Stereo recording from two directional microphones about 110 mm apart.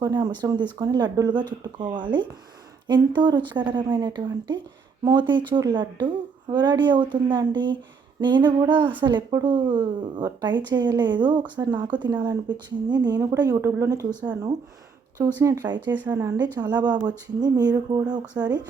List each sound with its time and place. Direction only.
0.0 s speech: 40° right (ahead or behind)
15.4 s speech: 40° right (ahead or behind)